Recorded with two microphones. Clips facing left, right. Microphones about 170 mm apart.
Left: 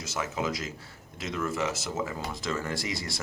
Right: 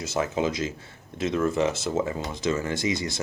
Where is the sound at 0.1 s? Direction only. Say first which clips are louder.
Right 5 dB; 25° right (ahead or behind).